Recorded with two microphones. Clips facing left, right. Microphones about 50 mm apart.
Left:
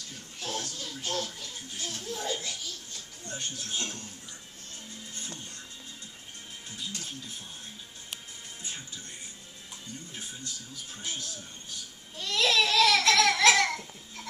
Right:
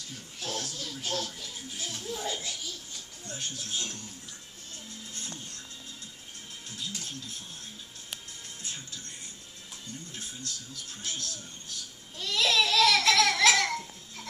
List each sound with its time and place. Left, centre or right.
0.4 s a sound: centre
5.1 s music: centre
7.0 s speech: centre
8.6 s speech: centre
10.1 s speech: centre
12.2 s a sound: centre